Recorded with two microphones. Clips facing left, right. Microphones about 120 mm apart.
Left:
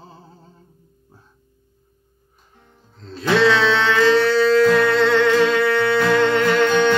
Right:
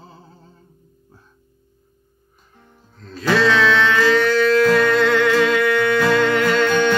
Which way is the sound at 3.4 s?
30° left (ahead or behind).